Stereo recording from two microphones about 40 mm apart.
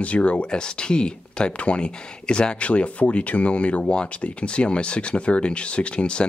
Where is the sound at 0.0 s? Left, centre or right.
Left.